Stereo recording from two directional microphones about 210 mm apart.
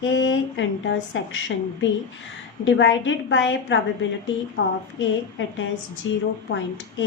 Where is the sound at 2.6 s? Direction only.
60° left (ahead or behind).